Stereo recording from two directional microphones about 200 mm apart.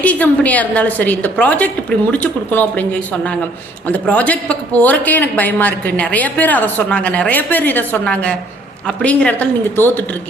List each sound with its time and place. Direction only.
0.0 s speech: 5° left (ahead or behind)